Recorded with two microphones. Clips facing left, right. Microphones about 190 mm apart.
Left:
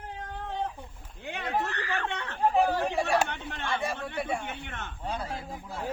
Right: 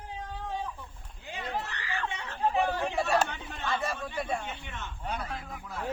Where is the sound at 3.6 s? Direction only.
15° left (ahead or behind).